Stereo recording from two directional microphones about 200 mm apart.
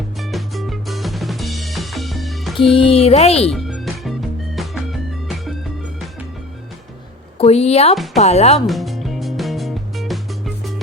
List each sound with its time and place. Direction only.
0.2 s drum kit: centre (ahead or behind)
2.7 s speech: 30° left (ahead or behind)
3.5 s music: centre (ahead or behind)
7.3 s speech: 30° left (ahead or behind)
8.6 s music: centre (ahead or behind)